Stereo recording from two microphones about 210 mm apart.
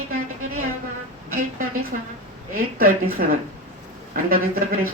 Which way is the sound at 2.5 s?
45° right (ahead or behind).